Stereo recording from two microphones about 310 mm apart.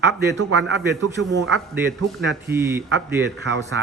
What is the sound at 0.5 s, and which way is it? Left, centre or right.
Speech, right.